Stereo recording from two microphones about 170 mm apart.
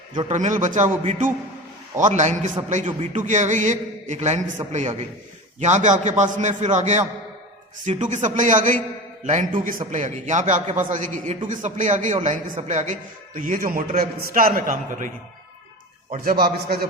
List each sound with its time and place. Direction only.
0.1 s a man's voice: 30° right (ahead or behind)
0.3 s a man's voice: 45° right (ahead or behind)
16.2 s a man's voice: 65° right (ahead or behind)